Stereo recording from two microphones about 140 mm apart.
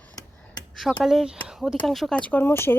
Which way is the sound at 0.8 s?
Centre (ahead or behind).